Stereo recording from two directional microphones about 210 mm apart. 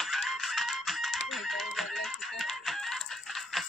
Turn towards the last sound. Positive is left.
turn(degrees=0)  # may be behind; listen again after turning